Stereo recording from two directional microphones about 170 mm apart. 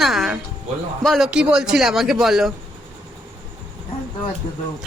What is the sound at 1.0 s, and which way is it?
A man's voice, centre (ahead or behind).